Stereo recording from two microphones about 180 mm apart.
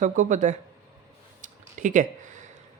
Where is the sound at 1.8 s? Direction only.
45° right (ahead or behind).